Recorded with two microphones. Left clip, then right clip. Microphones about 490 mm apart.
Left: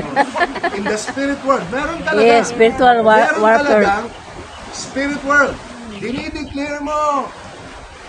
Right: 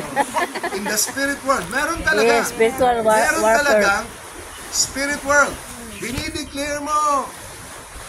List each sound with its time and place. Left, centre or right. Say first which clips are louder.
0.1 s speech: left 5 dB; right